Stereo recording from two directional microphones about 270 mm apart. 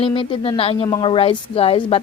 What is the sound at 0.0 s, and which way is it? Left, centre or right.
A woman's voice, centre.